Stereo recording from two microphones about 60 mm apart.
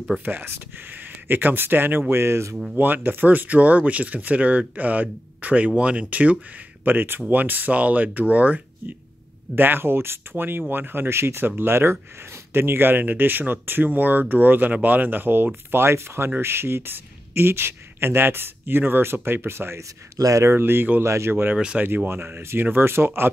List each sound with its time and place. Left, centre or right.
0.2 s speech: right
2.7 s speech: right
9.6 s speech: right
20.2 s speech: right
20.5 s speech: right
21.0 s speech: right